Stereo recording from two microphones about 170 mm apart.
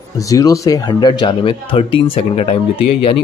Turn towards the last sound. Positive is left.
turn(degrees=35)  # may be behind; listen again after turning